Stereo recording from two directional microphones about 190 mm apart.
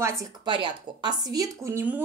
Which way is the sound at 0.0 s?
15° right (ahead or behind).